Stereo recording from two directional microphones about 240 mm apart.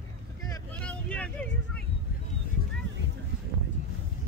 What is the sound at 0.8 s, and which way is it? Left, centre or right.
Vehicle, centre.